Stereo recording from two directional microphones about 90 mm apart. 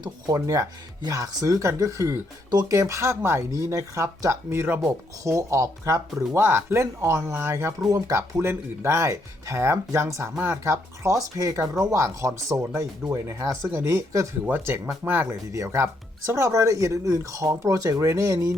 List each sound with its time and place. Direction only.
0.0 s speech: 40° right (ahead or behind)
14.4 s speech: 25° right (ahead or behind)